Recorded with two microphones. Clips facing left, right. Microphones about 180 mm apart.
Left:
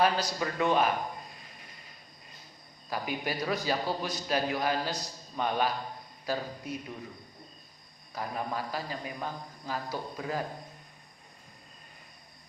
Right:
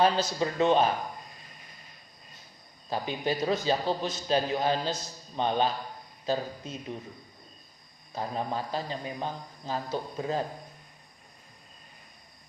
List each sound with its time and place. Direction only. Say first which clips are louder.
0.0 s a man's voice: right 3 dB; 25° right (ahead or behind)
2.9 s a man's voice: right 3 dB; 25° right (ahead or behind)
8.1 s a man's voice: right 2 dB; 25° right (ahead or behind)